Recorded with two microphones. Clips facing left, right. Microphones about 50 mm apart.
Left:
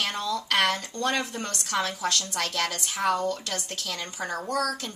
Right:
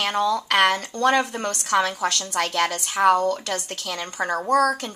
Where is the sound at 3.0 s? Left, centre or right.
Right.